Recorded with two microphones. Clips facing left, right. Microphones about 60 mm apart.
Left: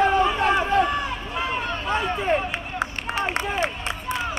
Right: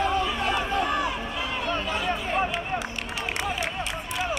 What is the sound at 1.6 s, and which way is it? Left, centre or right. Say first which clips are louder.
Run: left 2 dB; left.